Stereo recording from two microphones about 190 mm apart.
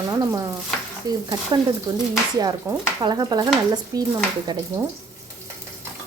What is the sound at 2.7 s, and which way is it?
Speech, 15° right (ahead or behind).